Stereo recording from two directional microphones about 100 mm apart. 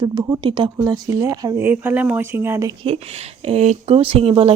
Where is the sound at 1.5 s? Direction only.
20° right (ahead or behind).